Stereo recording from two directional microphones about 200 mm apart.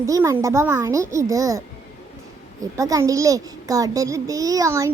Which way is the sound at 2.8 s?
15° right (ahead or behind).